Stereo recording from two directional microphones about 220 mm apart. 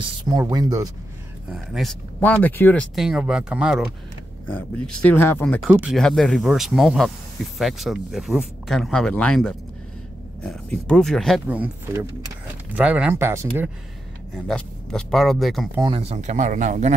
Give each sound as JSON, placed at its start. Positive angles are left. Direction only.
{"t": 0.0, "sound": "speech", "side_deg": -20}
{"t": 1.5, "sound": "speech", "side_deg": 0}
{"t": 4.5, "sound": "speech", "side_deg": 5}
{"t": 5.7, "sound": "speech", "side_deg": -5}
{"t": 14.3, "sound": "speech", "side_deg": 5}
{"t": 15.8, "sound": "speech", "side_deg": -25}